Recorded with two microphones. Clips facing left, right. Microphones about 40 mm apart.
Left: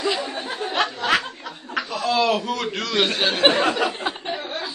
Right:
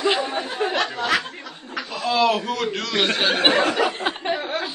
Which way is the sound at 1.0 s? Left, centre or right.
Left.